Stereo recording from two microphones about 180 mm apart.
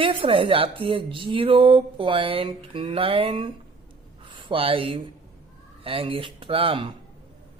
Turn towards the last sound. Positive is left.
turn(degrees=-30)  # may be behind; listen again after turning